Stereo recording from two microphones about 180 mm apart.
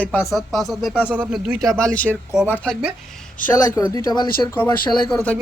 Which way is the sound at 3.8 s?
20° left (ahead or behind).